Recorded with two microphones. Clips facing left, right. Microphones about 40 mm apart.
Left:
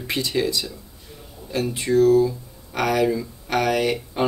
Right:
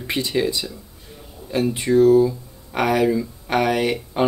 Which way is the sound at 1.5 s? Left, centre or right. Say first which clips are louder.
Right 3 dB; centre.